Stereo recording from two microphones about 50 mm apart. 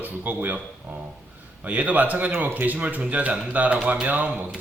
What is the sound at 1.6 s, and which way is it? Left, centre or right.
A man's voice, right.